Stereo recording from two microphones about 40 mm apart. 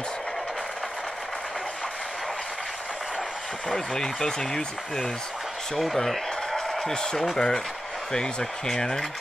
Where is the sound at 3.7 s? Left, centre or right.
Centre.